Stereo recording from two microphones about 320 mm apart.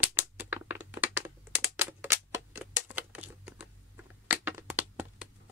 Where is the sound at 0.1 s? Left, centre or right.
Centre.